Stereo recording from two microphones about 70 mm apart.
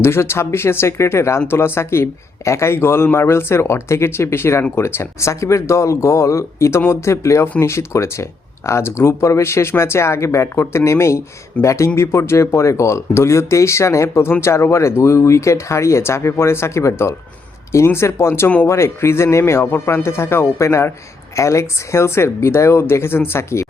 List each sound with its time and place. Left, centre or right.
0.0 s speech: left